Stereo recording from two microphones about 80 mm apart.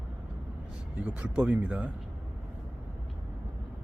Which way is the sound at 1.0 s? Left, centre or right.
Centre.